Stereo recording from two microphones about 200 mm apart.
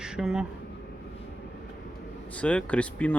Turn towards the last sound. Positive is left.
turn(degrees=5)  # may be behind; listen again after turning